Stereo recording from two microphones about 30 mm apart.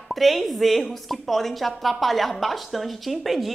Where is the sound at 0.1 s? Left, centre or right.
Centre.